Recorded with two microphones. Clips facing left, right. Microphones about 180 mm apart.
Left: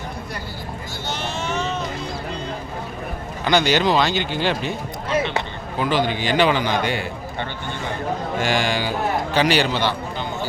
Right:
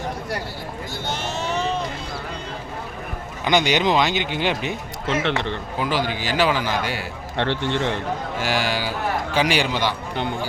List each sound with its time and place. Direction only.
1.2 s a sound: 35° right (ahead or behind)
3.4 s speech: 15° right (ahead or behind)
5.0 s speech: 80° right
5.8 s a man's voice: 10° right (ahead or behind)
7.3 s speech: 85° right
8.4 s speech: 5° right (ahead or behind)